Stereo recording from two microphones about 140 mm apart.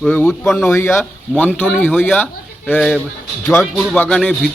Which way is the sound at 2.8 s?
Centre (ahead or behind).